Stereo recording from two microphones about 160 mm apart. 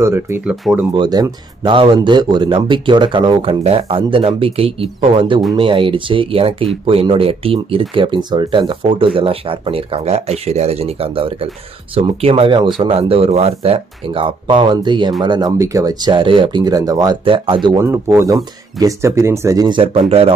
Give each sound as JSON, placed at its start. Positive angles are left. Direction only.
{"t": 0.0, "sound": "speech", "side_deg": -15}
{"t": 0.5, "sound": "speech", "side_deg": -5}
{"t": 0.9, "sound": "a man's voice", "side_deg": -25}
{"t": 17.7, "sound": "speech", "side_deg": -15}
{"t": 19.8, "sound": "a man's voice", "side_deg": -35}